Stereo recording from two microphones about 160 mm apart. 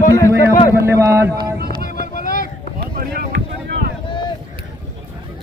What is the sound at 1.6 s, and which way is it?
Music, 75° right (ahead or behind).